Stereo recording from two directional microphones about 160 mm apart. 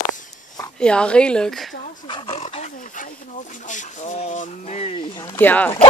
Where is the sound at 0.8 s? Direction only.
5° left (ahead or behind).